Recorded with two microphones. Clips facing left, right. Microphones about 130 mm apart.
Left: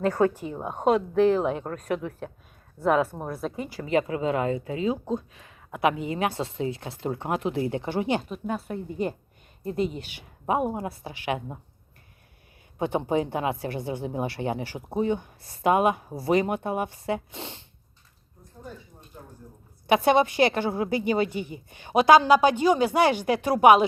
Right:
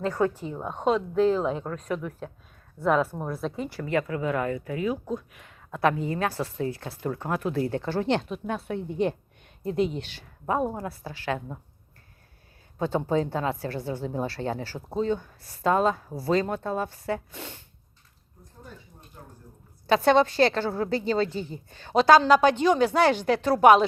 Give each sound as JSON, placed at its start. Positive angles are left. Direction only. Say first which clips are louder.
{"t": 0.2, "sound": "speech", "louder": "left 1 dB", "side_deg": 70}
{"t": 0.6, "sound": "speech", "louder": "left 2 dB", "side_deg": 10}
{"t": 0.9, "sound": "speech", "louder": "left 2 dB", "side_deg": 70}
{"t": 3.4, "sound": "speech", "louder": "even", "side_deg": 5}
{"t": 3.8, "sound": "speech", "louder": "left 3 dB", "side_deg": 20}
{"t": 5.7, "sound": "speech", "louder": "even", "side_deg": 15}
{"t": 12.8, "sound": "speech", "louder": "even", "side_deg": 15}
{"t": 19.9, "sound": "speech", "louder": "even", "side_deg": 15}